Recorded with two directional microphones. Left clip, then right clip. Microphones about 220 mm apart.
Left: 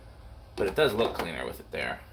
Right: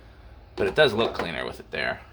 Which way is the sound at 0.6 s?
45° right (ahead or behind).